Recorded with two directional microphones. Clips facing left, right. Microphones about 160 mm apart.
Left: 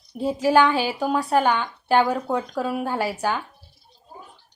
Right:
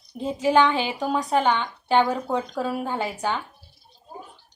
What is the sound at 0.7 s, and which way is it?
Speech, 20° right (ahead or behind).